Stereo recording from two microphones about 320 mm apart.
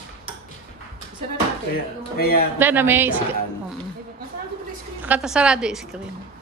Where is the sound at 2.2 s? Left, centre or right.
Left.